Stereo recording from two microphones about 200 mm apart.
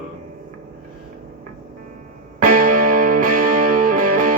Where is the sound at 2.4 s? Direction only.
45° right (ahead or behind).